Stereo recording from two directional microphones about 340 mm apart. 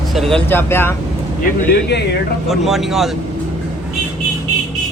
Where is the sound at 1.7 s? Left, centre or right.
Left.